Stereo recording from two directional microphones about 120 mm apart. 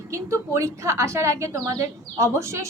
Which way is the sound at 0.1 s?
25° right (ahead or behind).